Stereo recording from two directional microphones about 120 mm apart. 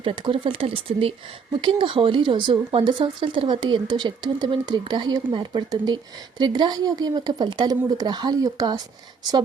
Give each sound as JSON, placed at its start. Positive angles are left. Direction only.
{"t": 0.0, "sound": "speech", "side_deg": -45}